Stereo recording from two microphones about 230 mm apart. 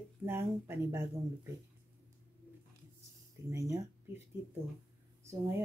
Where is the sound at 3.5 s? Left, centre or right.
Centre.